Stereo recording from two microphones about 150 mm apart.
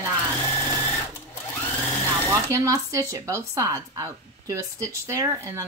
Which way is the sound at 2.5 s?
20° right (ahead or behind).